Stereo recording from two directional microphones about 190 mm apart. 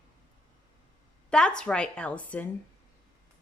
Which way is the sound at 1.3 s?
5° left (ahead or behind).